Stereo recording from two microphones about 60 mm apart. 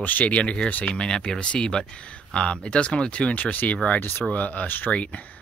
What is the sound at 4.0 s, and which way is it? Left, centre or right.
Speech, left.